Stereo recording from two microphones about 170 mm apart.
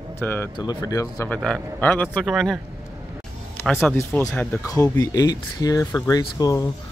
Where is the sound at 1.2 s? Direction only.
5° left (ahead or behind).